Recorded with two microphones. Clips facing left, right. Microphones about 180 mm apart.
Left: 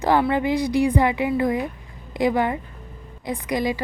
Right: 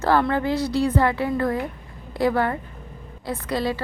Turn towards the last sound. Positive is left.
turn(degrees=15)  # may be behind; listen again after turning